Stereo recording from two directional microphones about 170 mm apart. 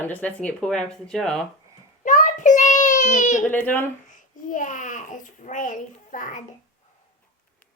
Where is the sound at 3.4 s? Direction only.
10° left (ahead or behind).